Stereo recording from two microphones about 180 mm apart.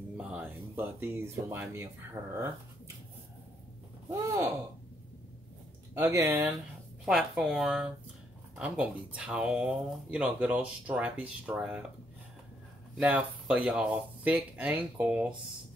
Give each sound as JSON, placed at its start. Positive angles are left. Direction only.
{"t": 0.2, "sound": "speech", "side_deg": -10}
{"t": 4.1, "sound": "speech", "side_deg": -20}
{"t": 5.9, "sound": "speech", "side_deg": -15}
{"t": 7.1, "sound": "speech", "side_deg": 0}
{"t": 12.9, "sound": "speech", "side_deg": -5}